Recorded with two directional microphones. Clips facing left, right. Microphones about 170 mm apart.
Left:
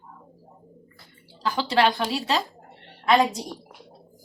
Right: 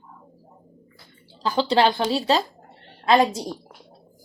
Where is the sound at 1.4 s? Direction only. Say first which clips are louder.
Right 3 dB; 30° right (ahead or behind).